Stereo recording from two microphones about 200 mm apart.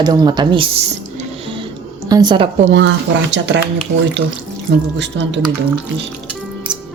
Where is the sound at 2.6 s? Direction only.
65° right (ahead or behind).